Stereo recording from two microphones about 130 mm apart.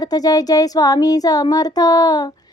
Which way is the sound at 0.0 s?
30° left (ahead or behind).